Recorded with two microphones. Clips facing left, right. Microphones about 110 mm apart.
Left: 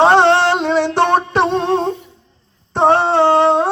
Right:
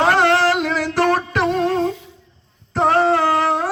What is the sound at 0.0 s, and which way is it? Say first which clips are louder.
Music: left 4 dB; 30° left (ahead or behind).